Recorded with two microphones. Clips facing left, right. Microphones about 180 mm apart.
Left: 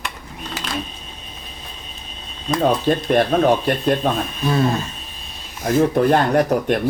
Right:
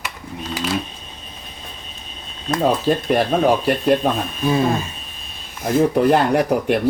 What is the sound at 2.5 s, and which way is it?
Speech, 5° right (ahead or behind).